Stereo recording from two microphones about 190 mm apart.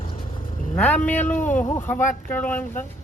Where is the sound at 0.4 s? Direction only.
45° left (ahead or behind).